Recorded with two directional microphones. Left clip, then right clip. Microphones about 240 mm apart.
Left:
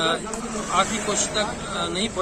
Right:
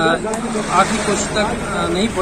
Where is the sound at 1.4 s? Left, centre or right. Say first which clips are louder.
Right 7 dB; centre.